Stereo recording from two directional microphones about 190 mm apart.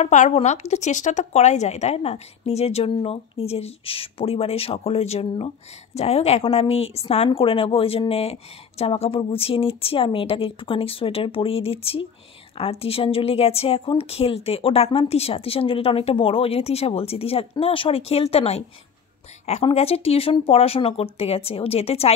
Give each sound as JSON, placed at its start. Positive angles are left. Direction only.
{"t": 0.0, "sound": "a woman's voice", "side_deg": 40}